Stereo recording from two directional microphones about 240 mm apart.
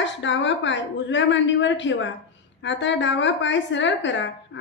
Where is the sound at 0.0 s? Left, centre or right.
Left.